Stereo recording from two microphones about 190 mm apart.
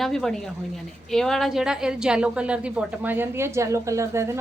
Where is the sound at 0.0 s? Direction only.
Centre (ahead or behind).